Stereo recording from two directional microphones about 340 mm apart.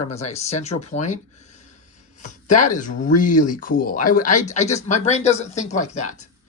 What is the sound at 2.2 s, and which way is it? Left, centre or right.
Speech, left.